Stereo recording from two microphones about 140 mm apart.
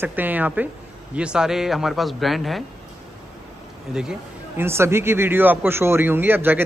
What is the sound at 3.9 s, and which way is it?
Speech, 5° right (ahead or behind).